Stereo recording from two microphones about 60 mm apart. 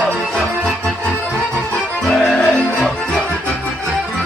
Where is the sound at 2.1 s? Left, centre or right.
Centre.